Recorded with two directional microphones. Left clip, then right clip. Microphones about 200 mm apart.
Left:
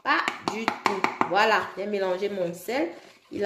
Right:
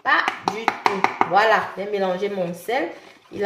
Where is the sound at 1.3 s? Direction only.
55° left (ahead or behind).